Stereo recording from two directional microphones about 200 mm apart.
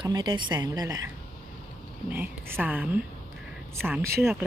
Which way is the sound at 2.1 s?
10° right (ahead or behind).